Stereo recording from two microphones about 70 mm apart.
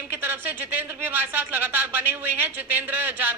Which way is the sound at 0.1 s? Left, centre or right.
Right.